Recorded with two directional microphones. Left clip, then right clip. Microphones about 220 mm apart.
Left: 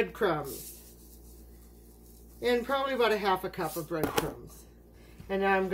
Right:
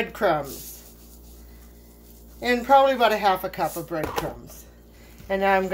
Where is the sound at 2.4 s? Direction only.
20° right (ahead or behind).